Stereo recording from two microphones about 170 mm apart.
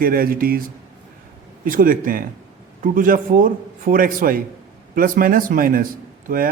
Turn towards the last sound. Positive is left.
turn(degrees=-55)  # may be behind; listen again after turning